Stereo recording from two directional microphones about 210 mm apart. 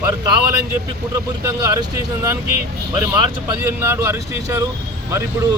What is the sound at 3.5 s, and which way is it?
Speech, 10° right (ahead or behind).